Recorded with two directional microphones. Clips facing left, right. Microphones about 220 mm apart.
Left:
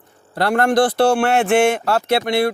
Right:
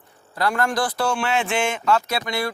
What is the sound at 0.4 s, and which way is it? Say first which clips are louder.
Speech: left 7 dB; 65° left (ahead or behind).